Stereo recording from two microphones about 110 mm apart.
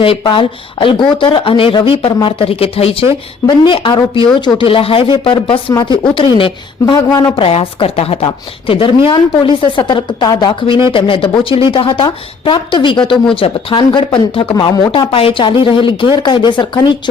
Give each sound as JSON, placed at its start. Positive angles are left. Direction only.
{"t": 0.0, "sound": "a woman's voice", "side_deg": 55}
{"t": 3.4, "sound": "a woman's voice", "side_deg": 45}
{"t": 7.3, "sound": "a woman's voice", "side_deg": 60}